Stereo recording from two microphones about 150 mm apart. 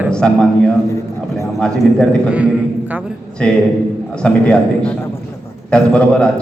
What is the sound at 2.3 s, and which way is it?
Speech, 10° right (ahead or behind).